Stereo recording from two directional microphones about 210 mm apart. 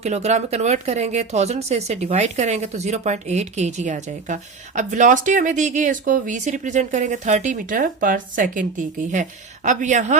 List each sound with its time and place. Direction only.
0.0 s speech: 30° right (ahead or behind)